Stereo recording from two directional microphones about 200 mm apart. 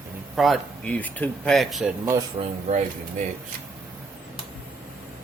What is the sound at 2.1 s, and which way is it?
Speech, 20° right (ahead or behind).